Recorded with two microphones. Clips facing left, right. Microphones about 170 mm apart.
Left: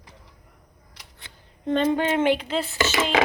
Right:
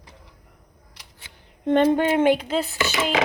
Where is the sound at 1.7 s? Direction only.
55° right (ahead or behind).